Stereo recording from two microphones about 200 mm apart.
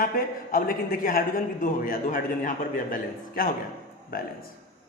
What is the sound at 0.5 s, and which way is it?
A man's voice, 45° left (ahead or behind).